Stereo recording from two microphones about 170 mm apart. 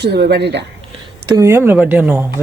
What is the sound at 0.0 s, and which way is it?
Speech, 80° right.